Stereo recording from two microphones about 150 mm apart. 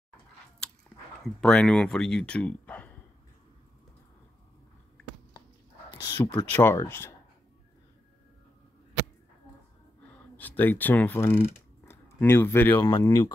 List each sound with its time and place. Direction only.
1.4 s speech: 5° left (ahead or behind)
6.2 s speech: 20° left (ahead or behind)
10.0 s speech: 10° left (ahead or behind)
12.8 s speech: 30° left (ahead or behind)